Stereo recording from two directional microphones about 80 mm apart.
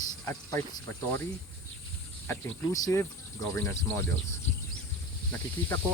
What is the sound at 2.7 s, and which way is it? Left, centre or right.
Speech, left.